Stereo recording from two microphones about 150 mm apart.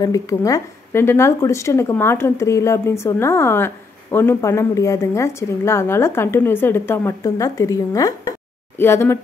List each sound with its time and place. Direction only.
0.0 s speech: 20° left (ahead or behind)